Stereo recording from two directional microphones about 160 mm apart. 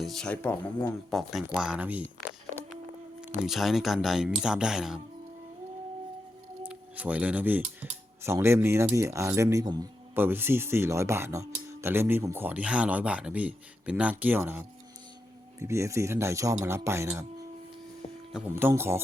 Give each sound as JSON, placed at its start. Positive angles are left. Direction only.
{"t": 0.0, "sound": "speech", "side_deg": 0}
{"t": 3.2, "sound": "speech", "side_deg": -5}
{"t": 6.6, "sound": "speech", "side_deg": -10}
{"t": 18.3, "sound": "speech", "side_deg": -10}